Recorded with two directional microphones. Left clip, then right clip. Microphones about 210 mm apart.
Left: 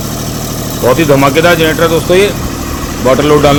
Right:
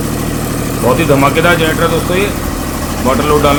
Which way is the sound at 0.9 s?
35° left (ahead or behind).